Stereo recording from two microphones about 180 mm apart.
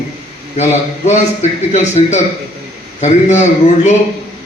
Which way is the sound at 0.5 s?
40° left (ahead or behind).